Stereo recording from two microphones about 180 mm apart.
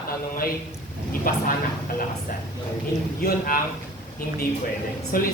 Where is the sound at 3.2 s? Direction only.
55° left (ahead or behind).